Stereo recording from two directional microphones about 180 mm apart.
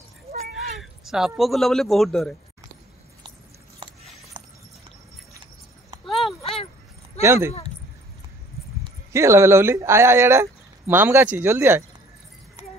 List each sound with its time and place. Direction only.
0.6 s speech: centre (ahead or behind)
5.3 s a sound: 20° right (ahead or behind)
7.2 s speech: 15° right (ahead or behind)
9.1 s speech: 15° right (ahead or behind)